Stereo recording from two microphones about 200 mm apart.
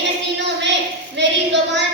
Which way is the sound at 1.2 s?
60° right (ahead or behind).